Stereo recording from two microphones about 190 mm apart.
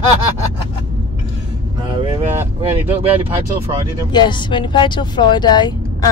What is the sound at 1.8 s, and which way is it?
Vehicle, 25° right (ahead or behind).